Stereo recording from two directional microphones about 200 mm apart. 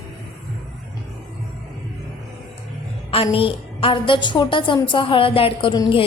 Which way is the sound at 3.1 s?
30° left (ahead or behind).